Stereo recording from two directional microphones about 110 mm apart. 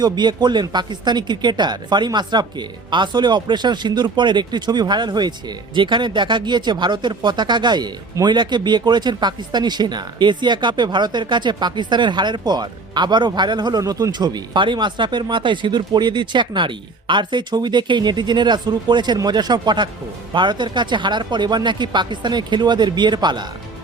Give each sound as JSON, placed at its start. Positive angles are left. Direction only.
{"t": 0.0, "sound": "speech", "side_deg": -40}